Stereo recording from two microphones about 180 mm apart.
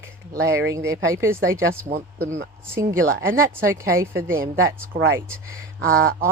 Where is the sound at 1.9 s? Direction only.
50° right (ahead or behind).